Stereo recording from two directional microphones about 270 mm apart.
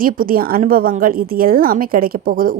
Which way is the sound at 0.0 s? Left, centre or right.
Right.